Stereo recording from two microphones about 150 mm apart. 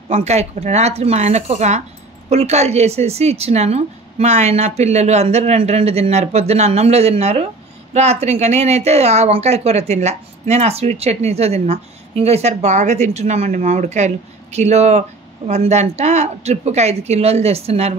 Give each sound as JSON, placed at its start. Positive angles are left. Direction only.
{"t": 0.1, "sound": "speech", "side_deg": -45}